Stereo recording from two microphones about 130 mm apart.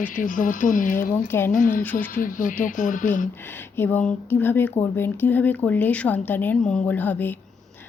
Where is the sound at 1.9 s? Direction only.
90° left.